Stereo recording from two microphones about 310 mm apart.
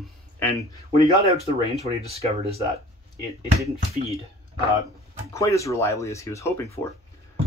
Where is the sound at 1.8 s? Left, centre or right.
Centre.